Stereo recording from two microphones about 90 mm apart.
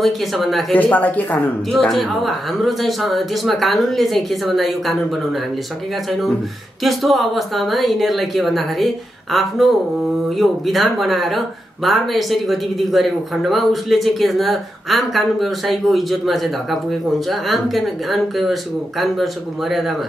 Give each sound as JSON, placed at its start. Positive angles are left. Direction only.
{"t": 0.0, "sound": "speech", "side_deg": 0}
{"t": 0.7, "sound": "speech", "side_deg": 15}
{"t": 1.7, "sound": "speech", "side_deg": 0}
{"t": 6.8, "sound": "speech", "side_deg": 0}